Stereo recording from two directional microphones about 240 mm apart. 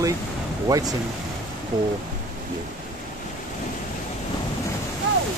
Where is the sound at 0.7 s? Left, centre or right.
Centre.